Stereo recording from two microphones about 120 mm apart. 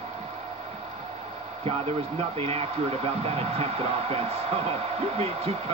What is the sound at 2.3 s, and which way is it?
Speech, 55° right (ahead or behind).